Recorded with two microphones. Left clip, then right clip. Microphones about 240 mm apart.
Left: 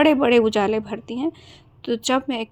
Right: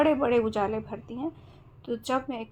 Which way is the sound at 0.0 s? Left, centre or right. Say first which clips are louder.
Left 7 dB; left.